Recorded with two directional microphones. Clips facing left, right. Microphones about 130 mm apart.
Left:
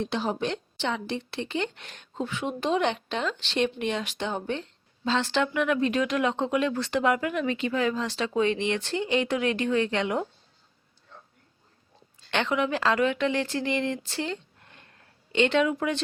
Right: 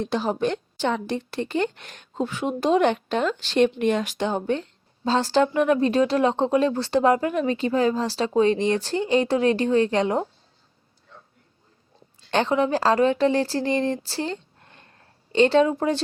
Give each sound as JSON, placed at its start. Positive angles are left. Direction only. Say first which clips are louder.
{"t": 0.0, "sound": "a woman's voice", "louder": "right 4 dB", "side_deg": -45}
{"t": 12.3, "sound": "speech", "louder": "right 5 dB", "side_deg": -35}